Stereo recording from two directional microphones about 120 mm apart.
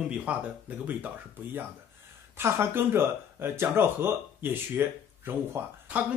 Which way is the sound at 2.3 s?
20° right (ahead or behind).